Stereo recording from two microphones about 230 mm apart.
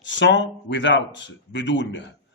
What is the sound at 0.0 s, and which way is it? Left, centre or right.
Speech, left.